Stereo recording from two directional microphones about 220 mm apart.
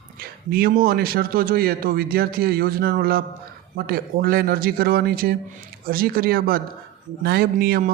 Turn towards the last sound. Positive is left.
turn(degrees=-40)  # may be behind; listen again after turning